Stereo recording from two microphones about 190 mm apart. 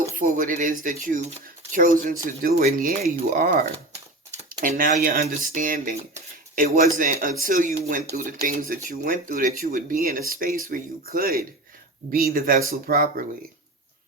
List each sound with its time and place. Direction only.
0.0 s speech: 45° right (ahead or behind)